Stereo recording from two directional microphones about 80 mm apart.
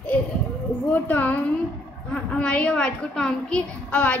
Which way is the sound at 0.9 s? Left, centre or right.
Left.